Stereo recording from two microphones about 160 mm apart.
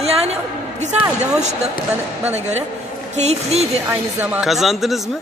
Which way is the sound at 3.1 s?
45° right (ahead or behind).